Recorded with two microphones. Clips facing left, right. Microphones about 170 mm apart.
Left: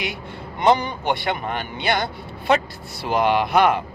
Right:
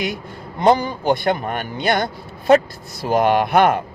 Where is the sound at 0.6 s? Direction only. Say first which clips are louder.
Right 3 dB; 35° right (ahead or behind).